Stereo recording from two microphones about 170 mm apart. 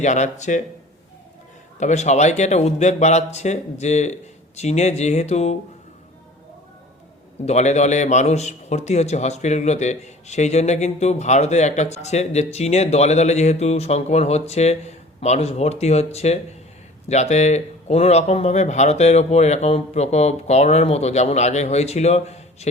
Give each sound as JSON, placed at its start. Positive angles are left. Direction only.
{"t": 0.0, "sound": "speech", "side_deg": 45}
{"t": 1.8, "sound": "a man's voice", "side_deg": 45}
{"t": 7.4, "sound": "a man's voice", "side_deg": 40}